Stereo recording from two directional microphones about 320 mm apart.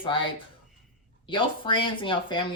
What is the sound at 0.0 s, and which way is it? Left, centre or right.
Speech, centre.